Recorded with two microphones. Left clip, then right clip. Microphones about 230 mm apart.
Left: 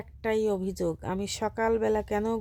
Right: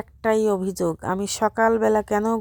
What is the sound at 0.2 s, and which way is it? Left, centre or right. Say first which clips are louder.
Speech: right 7 dB; right.